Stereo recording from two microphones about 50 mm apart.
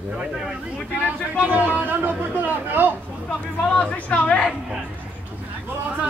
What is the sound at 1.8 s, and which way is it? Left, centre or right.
Speech, right.